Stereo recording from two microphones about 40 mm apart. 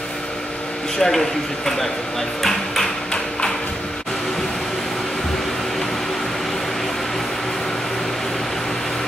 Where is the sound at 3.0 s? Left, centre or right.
Centre.